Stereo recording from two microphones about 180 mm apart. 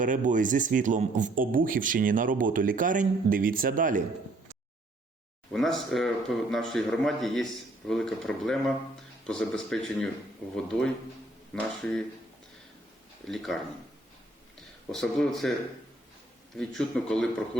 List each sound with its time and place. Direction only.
0.0 s speech: 45° right (ahead or behind)
5.5 s speech: centre (ahead or behind)
13.2 s speech: centre (ahead or behind)
14.9 s speech: centre (ahead or behind)
16.6 s speech: 5° left (ahead or behind)